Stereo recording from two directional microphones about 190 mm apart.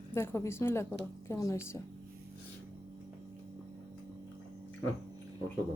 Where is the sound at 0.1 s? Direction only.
15° left (ahead or behind).